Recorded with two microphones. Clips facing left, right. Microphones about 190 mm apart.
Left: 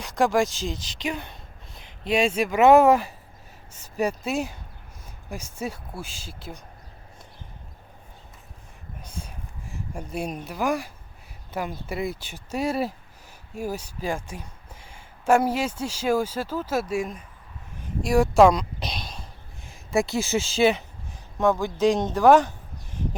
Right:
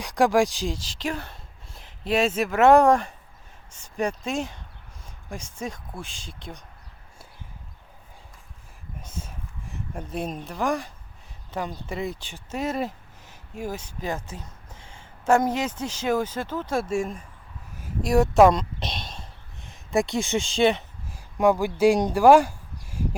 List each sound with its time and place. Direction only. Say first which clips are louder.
0.0 s speech: right 2 dB; 10° right (ahead or behind)
1.7 s speech: even; centre (ahead or behind)
9.0 s a sound: even; 25° right (ahead or behind)
10.0 s speech: even; centre (ahead or behind)
17.7 s a sound: even; 5° right (ahead or behind)
19.6 s speech: even; centre (ahead or behind)
21.3 s speech: right 2 dB; 10° right (ahead or behind)